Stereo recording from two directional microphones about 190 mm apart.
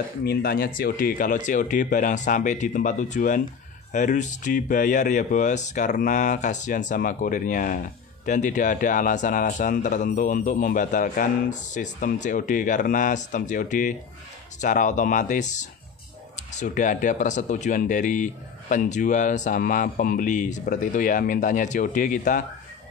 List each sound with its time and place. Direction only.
0.2 s speech: 55° left (ahead or behind)